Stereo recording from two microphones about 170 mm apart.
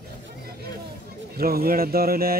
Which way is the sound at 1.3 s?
60° right (ahead or behind).